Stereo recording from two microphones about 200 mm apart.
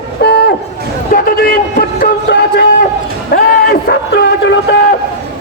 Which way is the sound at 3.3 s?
50° left (ahead or behind).